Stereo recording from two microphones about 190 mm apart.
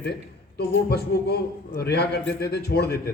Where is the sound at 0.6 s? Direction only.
55° left (ahead or behind).